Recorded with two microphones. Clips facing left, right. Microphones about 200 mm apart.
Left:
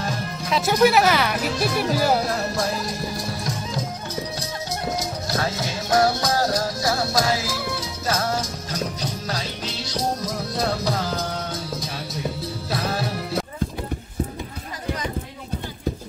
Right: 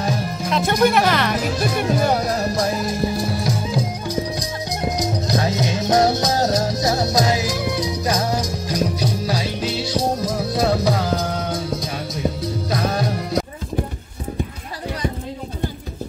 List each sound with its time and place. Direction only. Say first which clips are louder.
0.5 s speech: even; 5° left (ahead or behind)
2.2 s music: right 4 dB; 20° right (ahead or behind); by 11.0 s centre (ahead or behind)
12.9 s music: right 4 dB; 5° left (ahead or behind)